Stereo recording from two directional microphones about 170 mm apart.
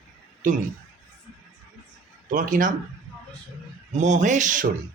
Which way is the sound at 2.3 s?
50° right (ahead or behind).